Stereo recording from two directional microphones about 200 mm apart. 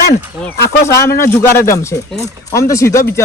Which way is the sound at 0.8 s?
15° left (ahead or behind).